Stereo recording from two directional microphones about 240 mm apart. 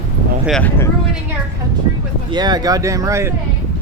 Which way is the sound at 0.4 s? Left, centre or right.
Centre.